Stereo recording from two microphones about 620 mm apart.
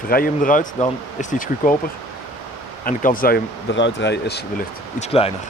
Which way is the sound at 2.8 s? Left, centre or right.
Centre.